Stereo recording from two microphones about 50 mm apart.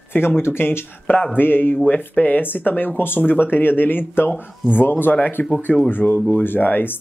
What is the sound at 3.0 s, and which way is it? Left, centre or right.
Speech, left.